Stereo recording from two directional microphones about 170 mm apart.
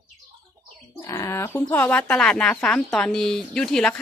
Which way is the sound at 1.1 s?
15° left (ahead or behind).